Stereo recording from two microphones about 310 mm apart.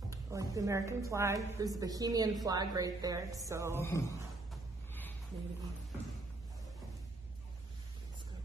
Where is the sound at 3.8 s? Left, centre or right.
Centre.